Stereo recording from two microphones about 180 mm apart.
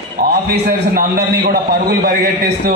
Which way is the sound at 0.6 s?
55° right (ahead or behind).